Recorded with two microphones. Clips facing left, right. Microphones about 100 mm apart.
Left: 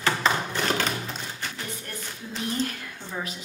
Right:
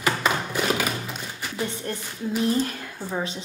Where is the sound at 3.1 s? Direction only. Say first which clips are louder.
Right 5 dB; 30° right (ahead or behind).